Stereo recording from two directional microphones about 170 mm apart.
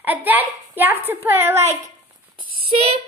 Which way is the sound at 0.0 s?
10° right (ahead or behind).